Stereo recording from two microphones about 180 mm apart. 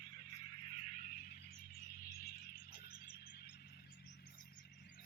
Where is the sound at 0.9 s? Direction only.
50° left (ahead or behind).